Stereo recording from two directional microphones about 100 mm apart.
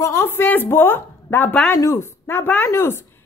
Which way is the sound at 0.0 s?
25° left (ahead or behind).